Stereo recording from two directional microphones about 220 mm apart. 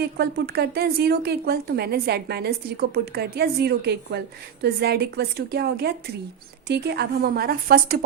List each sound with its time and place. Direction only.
0.2 s a woman's voice: 45° right (ahead or behind)